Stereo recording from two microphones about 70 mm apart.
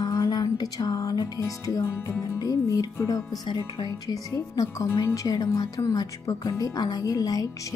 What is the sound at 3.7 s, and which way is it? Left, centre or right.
Speech, left.